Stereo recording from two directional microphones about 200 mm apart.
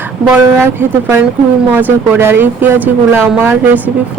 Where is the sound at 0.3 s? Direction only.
10° right (ahead or behind).